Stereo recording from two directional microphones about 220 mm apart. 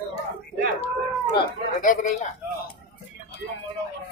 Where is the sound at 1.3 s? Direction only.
35° left (ahead or behind).